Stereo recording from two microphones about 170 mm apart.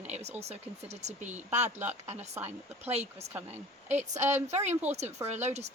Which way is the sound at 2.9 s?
40° right (ahead or behind).